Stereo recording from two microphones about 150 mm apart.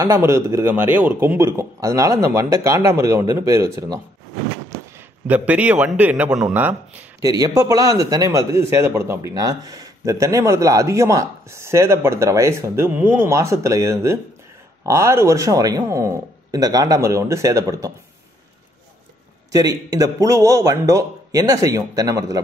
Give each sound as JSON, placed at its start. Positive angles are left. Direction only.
{"t": 0.0, "sound": "a man's voice", "side_deg": -20}
{"t": 5.2, "sound": "a man's voice", "side_deg": -10}
{"t": 7.2, "sound": "a man's voice", "side_deg": -25}
{"t": 19.5, "sound": "a man's voice", "side_deg": -25}